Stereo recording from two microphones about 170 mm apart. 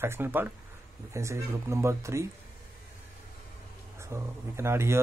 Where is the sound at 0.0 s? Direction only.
15° right (ahead or behind).